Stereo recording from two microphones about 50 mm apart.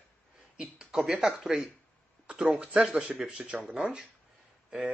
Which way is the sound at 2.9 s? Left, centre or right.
Centre.